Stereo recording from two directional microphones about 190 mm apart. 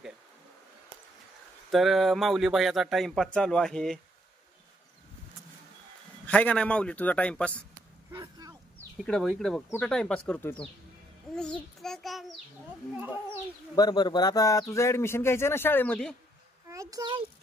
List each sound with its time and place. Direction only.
1.7 s speech: centre (ahead or behind)
6.2 s speech: 5° left (ahead or behind)
8.1 s a sound: 20° right (ahead or behind)
9.0 s speech: centre (ahead or behind)
11.3 s child singing: 5° left (ahead or behind)
13.7 s speech: 20° left (ahead or behind); by 16.2 s 5° left (ahead or behind)
16.6 s a sound: 15° right (ahead or behind)